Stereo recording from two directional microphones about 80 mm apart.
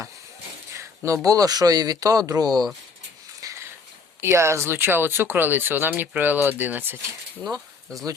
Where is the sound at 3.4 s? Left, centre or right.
Right.